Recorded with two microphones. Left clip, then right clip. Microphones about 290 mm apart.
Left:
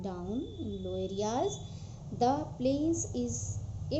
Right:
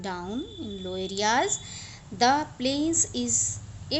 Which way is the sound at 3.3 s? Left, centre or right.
Right.